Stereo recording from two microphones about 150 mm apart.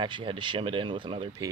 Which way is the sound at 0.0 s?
35° right (ahead or behind).